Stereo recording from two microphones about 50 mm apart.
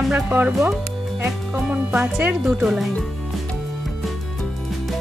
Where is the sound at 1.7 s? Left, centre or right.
Right.